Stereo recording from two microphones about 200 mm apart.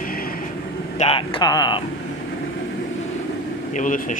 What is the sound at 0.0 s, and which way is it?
Vehicle, 45° left (ahead or behind).